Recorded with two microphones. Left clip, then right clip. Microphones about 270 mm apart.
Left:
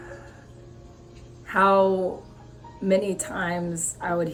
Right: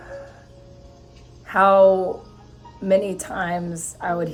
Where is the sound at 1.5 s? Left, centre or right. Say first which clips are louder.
Right 5 dB; centre.